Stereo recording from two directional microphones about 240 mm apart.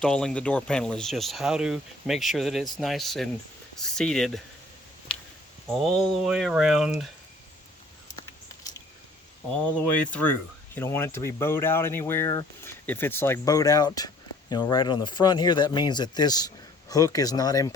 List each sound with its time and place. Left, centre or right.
0.0 s speech: centre
6.2 s speech: centre
9.6 s speech: centre